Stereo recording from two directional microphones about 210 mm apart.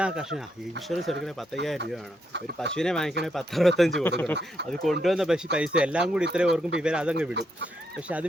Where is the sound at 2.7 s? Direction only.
5° left (ahead or behind).